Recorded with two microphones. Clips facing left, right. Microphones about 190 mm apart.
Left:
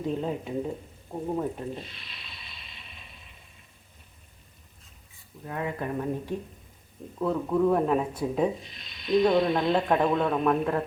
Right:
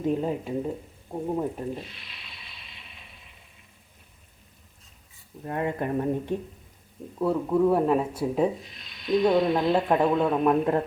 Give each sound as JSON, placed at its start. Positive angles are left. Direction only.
{"t": 0.0, "sound": "speech", "side_deg": -10}
{"t": 5.5, "sound": "speech", "side_deg": -25}
{"t": 7.2, "sound": "speech", "side_deg": -5}
{"t": 10.4, "sound": "speech", "side_deg": -20}